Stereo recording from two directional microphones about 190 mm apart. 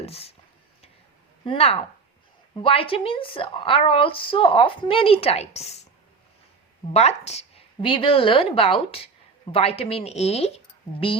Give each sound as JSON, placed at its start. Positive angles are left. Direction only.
{"t": 0.0, "sound": "speech", "side_deg": 30}
{"t": 1.5, "sound": "a woman's voice", "side_deg": 30}
{"t": 6.9, "sound": "a woman's voice", "side_deg": 35}